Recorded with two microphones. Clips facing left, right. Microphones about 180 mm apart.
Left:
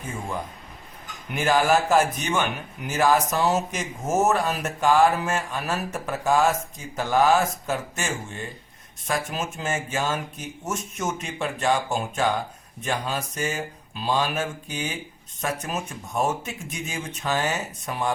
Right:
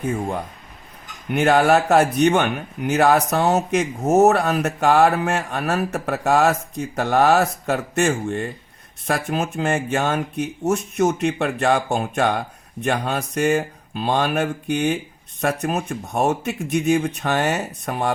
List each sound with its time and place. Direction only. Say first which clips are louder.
0.0 s speech: right 7 dB; 65° right (ahead or behind)